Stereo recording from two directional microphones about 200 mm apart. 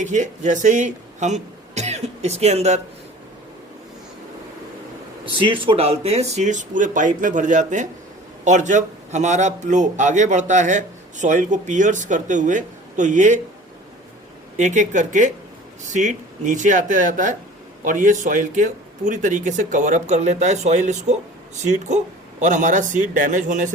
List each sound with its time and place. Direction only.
0.0 s speech: 35° right (ahead or behind)
5.2 s a man's voice: 25° right (ahead or behind)
14.5 s a man's voice: 35° right (ahead or behind)